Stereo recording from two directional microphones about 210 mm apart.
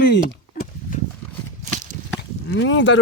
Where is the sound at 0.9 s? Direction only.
40° left (ahead or behind).